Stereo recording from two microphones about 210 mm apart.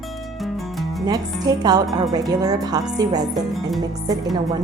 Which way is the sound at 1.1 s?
20° right (ahead or behind).